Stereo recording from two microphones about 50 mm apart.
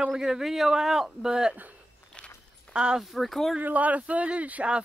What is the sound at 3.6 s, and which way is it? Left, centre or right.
Speech, right.